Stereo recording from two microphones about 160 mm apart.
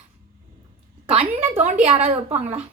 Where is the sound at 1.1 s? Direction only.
40° right (ahead or behind).